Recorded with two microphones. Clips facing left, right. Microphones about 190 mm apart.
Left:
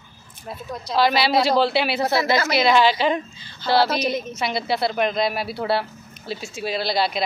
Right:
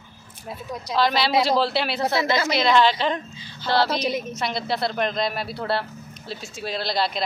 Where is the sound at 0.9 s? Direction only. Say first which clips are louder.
Left 2 dB; 5° left (ahead or behind).